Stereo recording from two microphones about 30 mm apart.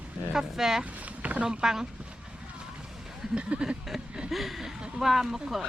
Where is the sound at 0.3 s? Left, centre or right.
Centre.